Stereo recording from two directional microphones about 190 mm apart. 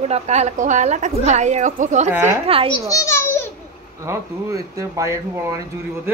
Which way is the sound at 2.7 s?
20° left (ahead or behind).